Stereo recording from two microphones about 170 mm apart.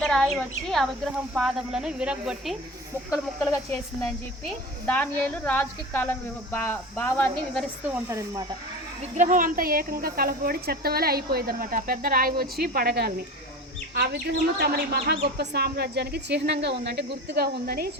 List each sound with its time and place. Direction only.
0.0 s speech: 5° left (ahead or behind)
3.1 s speech: 20° left (ahead or behind)
7.9 s speech: 20° right (ahead or behind)
9.0 s speech: 50° right (ahead or behind); by 17.8 s 65° right (ahead or behind)